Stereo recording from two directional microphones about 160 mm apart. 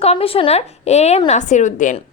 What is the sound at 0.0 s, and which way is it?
A woman's voice, 40° left (ahead or behind).